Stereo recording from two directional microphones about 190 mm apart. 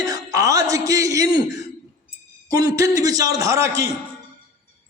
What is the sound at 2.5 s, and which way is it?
A man's voice, 15° right (ahead or behind).